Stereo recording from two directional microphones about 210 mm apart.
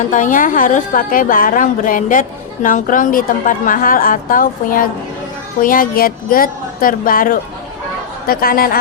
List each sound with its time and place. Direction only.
0.1 s a woman's voice: 40° left (ahead or behind)